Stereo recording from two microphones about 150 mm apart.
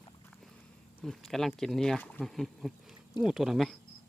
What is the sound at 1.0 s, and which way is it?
Speech, 5° left (ahead or behind).